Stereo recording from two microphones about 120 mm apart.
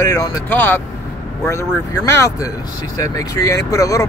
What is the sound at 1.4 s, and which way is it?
Speech, 25° left (ahead or behind).